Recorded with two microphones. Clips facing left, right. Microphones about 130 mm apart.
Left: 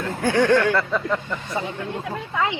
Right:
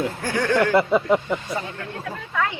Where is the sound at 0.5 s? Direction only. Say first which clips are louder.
Right 1 dB; 15° right (ahead or behind).